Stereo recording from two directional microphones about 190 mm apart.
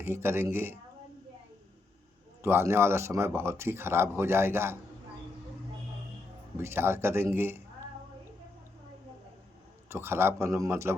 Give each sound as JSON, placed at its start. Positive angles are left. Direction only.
{"t": 0.0, "sound": "speech", "side_deg": -15}
{"t": 2.4, "sound": "speech", "side_deg": -15}
{"t": 6.6, "sound": "speech", "side_deg": -10}
{"t": 9.9, "sound": "speech", "side_deg": -10}